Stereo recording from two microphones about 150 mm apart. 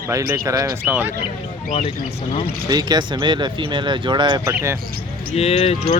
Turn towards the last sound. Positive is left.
turn(degrees=50)  # may be behind; listen again after turning